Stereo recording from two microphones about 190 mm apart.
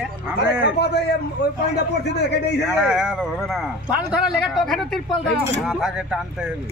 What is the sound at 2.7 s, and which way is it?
Speech, 5° right (ahead or behind).